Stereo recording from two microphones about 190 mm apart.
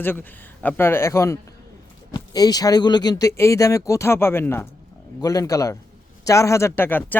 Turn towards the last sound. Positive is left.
turn(degrees=10)  # may be behind; listen again after turning